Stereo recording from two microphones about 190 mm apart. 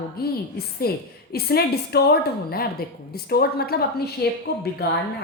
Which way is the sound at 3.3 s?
55° left (ahead or behind).